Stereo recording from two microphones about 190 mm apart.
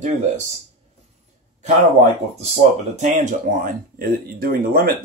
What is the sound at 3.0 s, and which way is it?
Speech, 40° right (ahead or behind).